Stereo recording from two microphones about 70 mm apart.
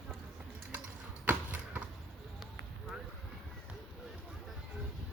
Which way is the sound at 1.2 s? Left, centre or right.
Right.